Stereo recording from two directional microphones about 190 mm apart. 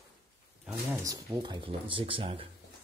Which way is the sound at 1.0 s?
20° right (ahead or behind).